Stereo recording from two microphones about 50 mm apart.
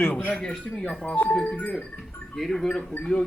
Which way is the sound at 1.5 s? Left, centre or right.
Left.